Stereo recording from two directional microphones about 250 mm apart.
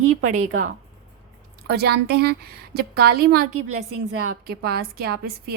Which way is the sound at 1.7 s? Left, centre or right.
Right.